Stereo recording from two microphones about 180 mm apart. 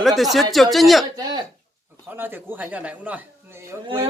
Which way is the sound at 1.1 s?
25° right (ahead or behind).